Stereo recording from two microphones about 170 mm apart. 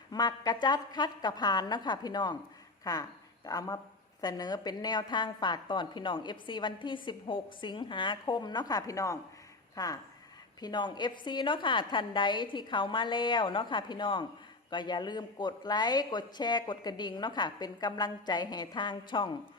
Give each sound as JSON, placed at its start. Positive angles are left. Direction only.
{"t": 0.1, "sound": "speech", "side_deg": 25}